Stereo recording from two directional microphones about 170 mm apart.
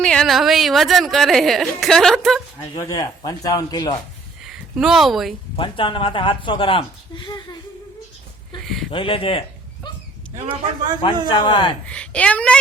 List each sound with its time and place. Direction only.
0.0 s a woman's voice: 5° left (ahead or behind)
2.7 s speech: 20° left (ahead or behind)
4.4 s speech: 5° right (ahead or behind)
5.5 s speech: 30° left (ahead or behind)
8.6 s a sound: centre (ahead or behind)
8.9 s speech: 30° left (ahead or behind)
10.3 s a man's voice: 40° right (ahead or behind)
11.3 s speech: 25° left (ahead or behind)
11.9 s a woman's voice: 5° left (ahead or behind)